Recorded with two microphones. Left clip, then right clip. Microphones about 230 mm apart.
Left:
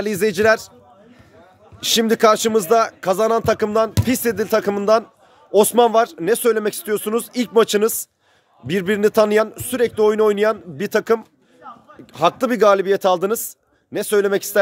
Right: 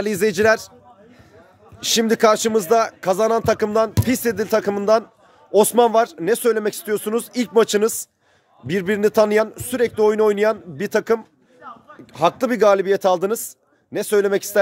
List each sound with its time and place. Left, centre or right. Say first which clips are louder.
0.0 s speech: even; centre
1.8 s a man's voice: left 1 dB; centre
11.6 s a sound: even; centre
12.1 s a man's voice: left 1 dB; centre